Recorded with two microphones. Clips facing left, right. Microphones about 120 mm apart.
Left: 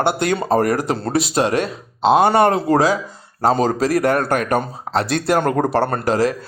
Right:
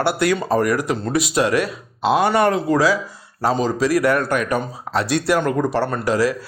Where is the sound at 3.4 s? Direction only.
50° left (ahead or behind).